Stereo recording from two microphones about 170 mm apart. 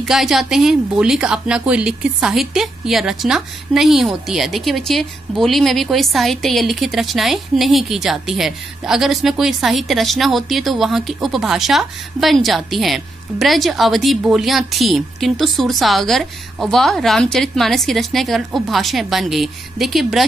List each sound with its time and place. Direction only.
0.0 s speech: centre (ahead or behind)